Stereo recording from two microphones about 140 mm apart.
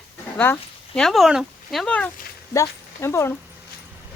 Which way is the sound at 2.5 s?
20° left (ahead or behind).